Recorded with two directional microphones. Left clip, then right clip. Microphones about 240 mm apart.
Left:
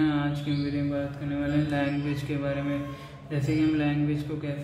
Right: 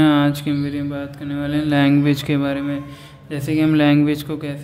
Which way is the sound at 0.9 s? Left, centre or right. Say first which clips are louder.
Right 4 dB; right.